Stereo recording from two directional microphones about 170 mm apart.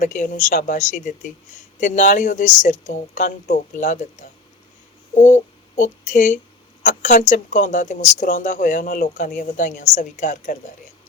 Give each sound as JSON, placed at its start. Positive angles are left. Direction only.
{"t": 0.0, "sound": "speech", "side_deg": 50}